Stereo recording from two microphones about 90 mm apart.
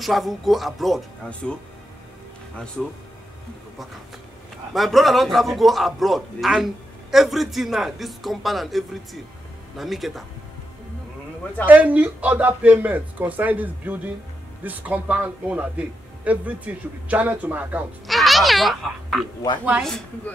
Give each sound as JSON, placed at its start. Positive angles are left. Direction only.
{"t": 0.0, "sound": "a man's voice", "side_deg": 0}
{"t": 4.7, "sound": "a man's voice", "side_deg": 0}
{"t": 11.6, "sound": "speech", "side_deg": -15}
{"t": 18.0, "sound": "a child's voice", "side_deg": 0}